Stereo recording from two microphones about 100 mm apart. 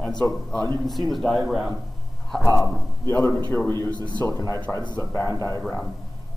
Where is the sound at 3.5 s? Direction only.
25° left (ahead or behind).